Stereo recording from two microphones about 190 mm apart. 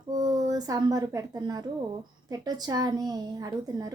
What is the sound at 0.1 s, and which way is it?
A woman's voice, 20° right (ahead or behind).